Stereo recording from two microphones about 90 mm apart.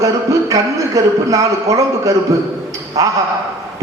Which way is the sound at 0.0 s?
35° right (ahead or behind).